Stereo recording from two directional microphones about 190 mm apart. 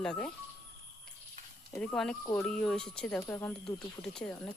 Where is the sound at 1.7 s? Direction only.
15° left (ahead or behind).